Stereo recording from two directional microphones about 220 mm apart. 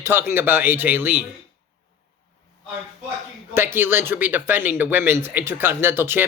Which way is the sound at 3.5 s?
10° right (ahead or behind).